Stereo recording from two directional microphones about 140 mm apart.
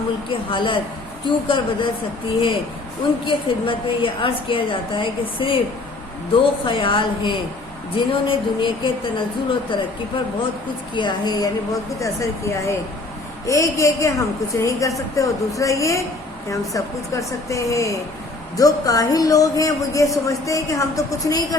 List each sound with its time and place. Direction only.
0.3 s a woman's voice: 35° left (ahead or behind)
3.2 s a woman's voice: 40° left (ahead or behind)
10.9 s a woman's voice: 30° left (ahead or behind)